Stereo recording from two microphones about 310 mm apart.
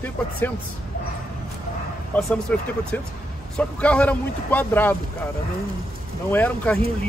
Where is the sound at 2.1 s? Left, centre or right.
Centre.